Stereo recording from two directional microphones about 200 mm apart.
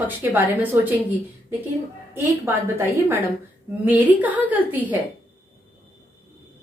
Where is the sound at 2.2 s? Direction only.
15° right (ahead or behind).